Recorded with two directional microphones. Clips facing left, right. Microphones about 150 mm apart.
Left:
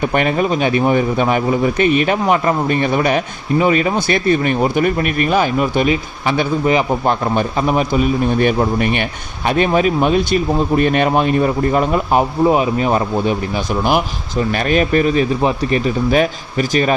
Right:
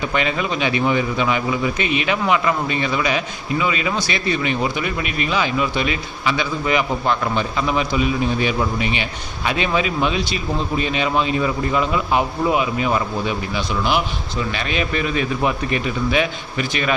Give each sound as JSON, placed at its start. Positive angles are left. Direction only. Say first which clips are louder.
{"t": 0.0, "sound": "a man's voice", "louder": "left 6 dB", "side_deg": 55}